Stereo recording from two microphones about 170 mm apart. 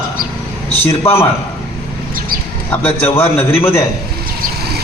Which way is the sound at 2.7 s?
10° left (ahead or behind).